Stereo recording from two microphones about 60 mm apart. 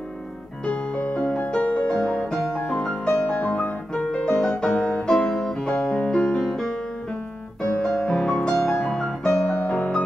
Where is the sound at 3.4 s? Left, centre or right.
Left.